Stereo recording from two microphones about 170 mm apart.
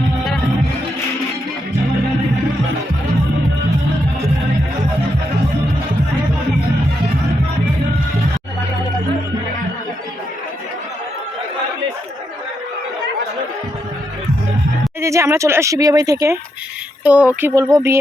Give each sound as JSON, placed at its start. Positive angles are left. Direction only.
{"t": 15.0, "sound": "speech", "side_deg": -15}
{"t": 17.0, "sound": "speech", "side_deg": -10}
{"t": 17.5, "sound": "speech", "side_deg": -20}